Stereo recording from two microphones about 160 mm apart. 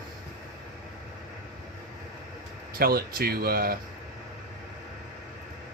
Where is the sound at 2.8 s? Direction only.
70° right (ahead or behind).